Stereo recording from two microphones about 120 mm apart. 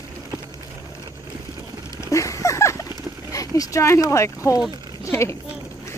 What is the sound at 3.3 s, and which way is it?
Speech, 30° left (ahead or behind).